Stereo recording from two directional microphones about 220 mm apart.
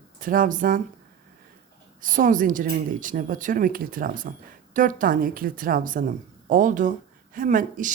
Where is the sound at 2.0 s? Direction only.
35° right (ahead or behind).